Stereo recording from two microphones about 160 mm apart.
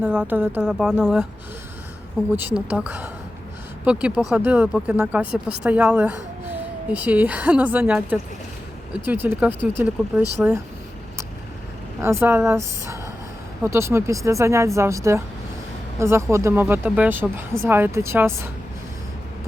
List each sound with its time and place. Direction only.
0.0 s speech: 10° right (ahead or behind)
2.3 s speech: 10° right (ahead or behind)
11.9 s speech: 15° right (ahead or behind)